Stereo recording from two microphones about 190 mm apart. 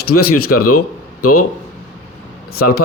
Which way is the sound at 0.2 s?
55° left (ahead or behind).